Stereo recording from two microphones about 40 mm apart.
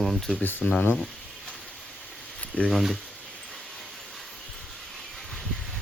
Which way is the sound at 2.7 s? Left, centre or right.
Centre.